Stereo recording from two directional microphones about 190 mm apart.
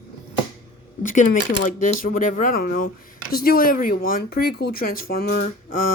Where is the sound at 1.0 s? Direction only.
45° left (ahead or behind).